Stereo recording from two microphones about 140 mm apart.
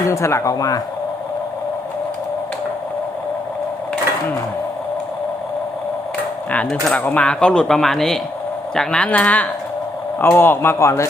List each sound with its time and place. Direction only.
0.1 s speech: 20° left (ahead or behind)
6.5 s speech: 5° left (ahead or behind)